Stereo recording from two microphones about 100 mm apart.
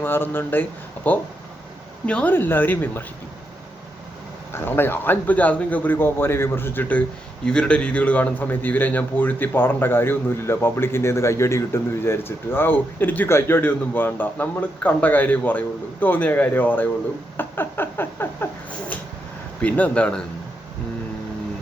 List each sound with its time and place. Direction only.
0.0 s a man's voice: 20° left (ahead or behind)
4.5 s a man's voice: 20° left (ahead or behind)
17.3 s a sound: 20° left (ahead or behind)
19.6 s a man's voice: 15° left (ahead or behind)